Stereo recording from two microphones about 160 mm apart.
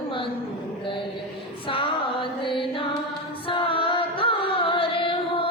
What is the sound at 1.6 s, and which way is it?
Female singing, 35° left (ahead or behind).